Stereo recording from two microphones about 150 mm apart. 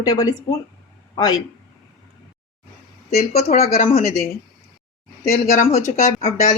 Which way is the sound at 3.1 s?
85° left.